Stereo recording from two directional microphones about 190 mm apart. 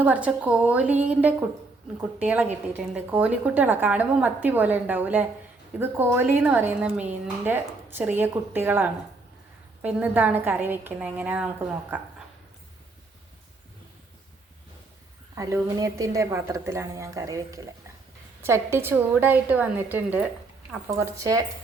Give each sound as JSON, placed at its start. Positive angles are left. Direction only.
{"t": 0.0, "sound": "a woman's voice", "side_deg": -5}
{"t": 15.4, "sound": "a woman's voice", "side_deg": -15}